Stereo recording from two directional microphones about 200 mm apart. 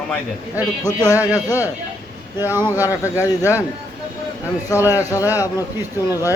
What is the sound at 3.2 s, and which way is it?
Speech, 15° left (ahead or behind).